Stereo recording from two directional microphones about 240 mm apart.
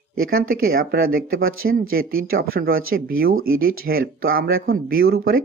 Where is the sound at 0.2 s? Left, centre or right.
Right.